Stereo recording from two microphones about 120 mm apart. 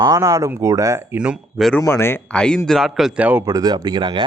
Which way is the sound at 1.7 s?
20° left (ahead or behind).